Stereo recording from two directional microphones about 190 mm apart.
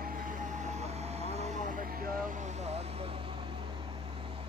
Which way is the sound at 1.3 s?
35° right (ahead or behind).